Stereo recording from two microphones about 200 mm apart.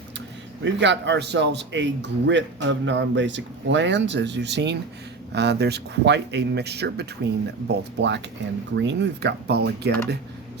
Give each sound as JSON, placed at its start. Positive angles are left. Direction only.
{"t": 0.6, "sound": "a man's voice", "side_deg": -60}